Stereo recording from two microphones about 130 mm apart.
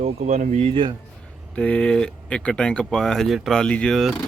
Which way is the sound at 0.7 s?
40° right (ahead or behind).